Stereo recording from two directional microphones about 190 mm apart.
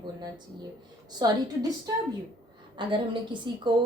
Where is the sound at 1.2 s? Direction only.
20° right (ahead or behind).